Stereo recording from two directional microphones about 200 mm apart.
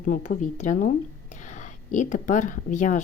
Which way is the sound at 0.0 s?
40° left (ahead or behind).